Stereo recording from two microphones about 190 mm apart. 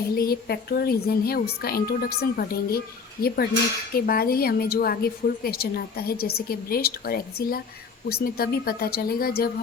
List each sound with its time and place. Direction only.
0.2 s a woman's voice: 55° left (ahead or behind)